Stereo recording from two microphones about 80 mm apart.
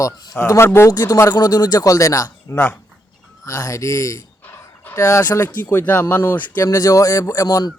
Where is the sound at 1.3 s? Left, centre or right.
Left.